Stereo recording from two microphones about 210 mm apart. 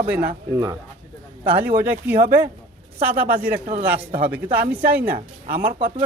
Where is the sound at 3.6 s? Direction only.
30° right (ahead or behind).